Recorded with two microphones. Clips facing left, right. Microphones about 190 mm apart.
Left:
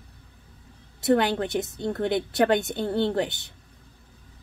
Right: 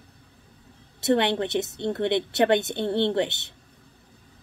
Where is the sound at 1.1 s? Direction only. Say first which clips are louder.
Even; 25° right (ahead or behind).